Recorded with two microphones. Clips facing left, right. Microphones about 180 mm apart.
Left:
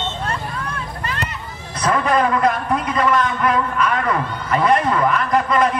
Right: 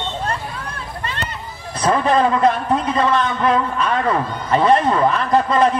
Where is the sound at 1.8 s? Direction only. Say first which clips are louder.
Right 2 dB; 30° right (ahead or behind).